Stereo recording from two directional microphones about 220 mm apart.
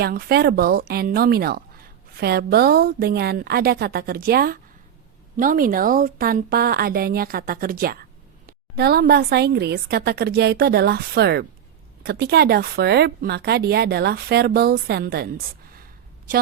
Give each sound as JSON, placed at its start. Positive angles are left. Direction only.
{"t": 0.0, "sound": "a woman's voice", "side_deg": -45}